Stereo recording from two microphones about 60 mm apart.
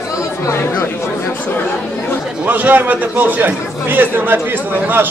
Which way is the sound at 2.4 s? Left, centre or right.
Right.